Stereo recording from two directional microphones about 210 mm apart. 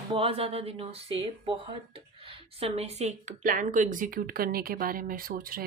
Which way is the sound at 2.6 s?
30° right (ahead or behind).